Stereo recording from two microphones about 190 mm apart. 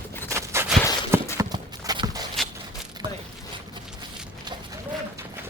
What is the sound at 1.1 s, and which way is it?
Clip-clop, 20° right (ahead or behind).